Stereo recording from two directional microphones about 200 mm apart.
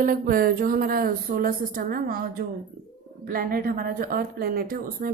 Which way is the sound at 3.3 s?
45° right (ahead or behind).